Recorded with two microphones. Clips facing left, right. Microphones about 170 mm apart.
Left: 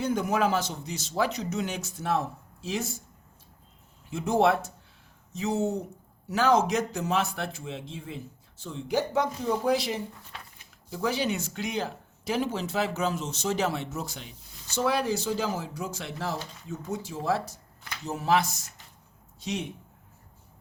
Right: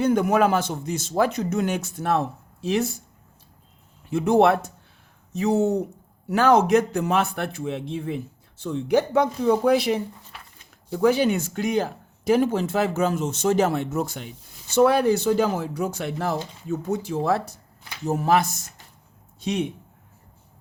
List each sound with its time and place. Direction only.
0.0 s speech: 60° right (ahead or behind)
4.1 s speech: 65° right (ahead or behind)
10.9 s speech: 55° right (ahead or behind)
18.0 s speech: 50° right (ahead or behind)